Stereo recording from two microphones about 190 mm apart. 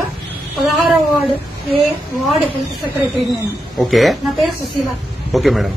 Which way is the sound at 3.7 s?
Centre (ahead or behind).